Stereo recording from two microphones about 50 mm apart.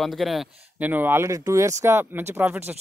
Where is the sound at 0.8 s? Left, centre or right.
Right.